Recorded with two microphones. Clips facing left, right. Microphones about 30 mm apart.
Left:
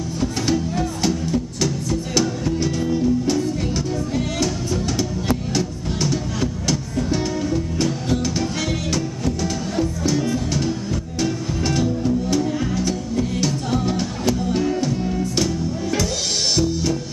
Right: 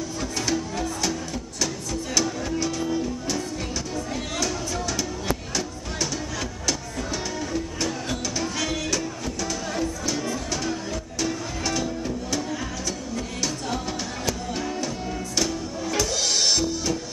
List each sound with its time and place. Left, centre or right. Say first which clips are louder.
0.2 s music: left 6 dB; left
5.9 s music: left 6 dB; left
7.4 s music: left 6 dB; centre
9.4 s music: left 2 dB; left
10.1 s music: left 6 dB; centre
14.9 s music: left 7 dB; centre